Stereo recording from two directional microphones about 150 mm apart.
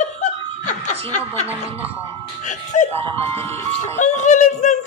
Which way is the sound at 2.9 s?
40° right (ahead or behind).